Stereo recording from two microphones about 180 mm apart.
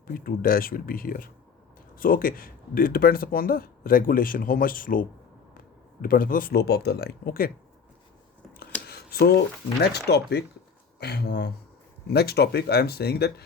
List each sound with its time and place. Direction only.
0.1 s speech: 55° left (ahead or behind)
8.9 s a sound: 60° left (ahead or behind)
9.8 s speech: 65° left (ahead or behind)